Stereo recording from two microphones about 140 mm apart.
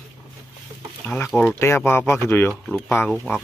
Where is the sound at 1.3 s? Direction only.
15° left (ahead or behind).